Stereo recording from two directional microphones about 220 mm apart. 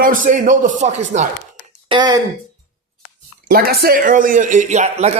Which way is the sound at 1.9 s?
20° right (ahead or behind).